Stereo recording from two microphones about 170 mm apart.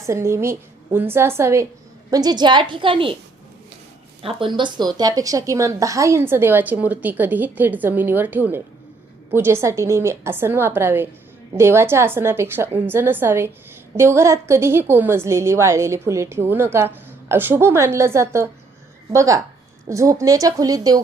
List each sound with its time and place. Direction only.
0.0 s a woman's voice: 15° right (ahead or behind)
4.2 s a woman's voice: 30° right (ahead or behind)